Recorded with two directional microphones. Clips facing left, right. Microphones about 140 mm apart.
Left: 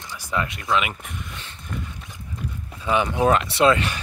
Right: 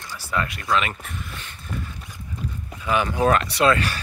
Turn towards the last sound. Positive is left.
turn(degrees=20)  # may be behind; listen again after turning